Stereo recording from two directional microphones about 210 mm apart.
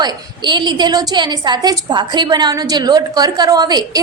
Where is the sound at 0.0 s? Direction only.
20° right (ahead or behind).